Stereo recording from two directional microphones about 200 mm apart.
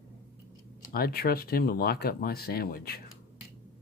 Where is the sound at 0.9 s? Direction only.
50° left (ahead or behind).